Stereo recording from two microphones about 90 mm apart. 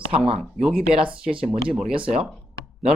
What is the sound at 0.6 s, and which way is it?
Speech, 5° right (ahead or behind).